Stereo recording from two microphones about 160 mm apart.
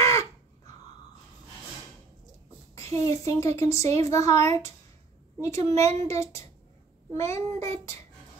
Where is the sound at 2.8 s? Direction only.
20° left (ahead or behind).